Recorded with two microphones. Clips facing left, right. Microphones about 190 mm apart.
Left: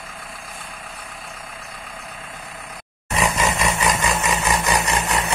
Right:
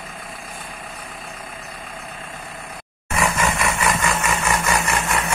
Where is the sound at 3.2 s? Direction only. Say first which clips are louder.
Even; 20° left (ahead or behind).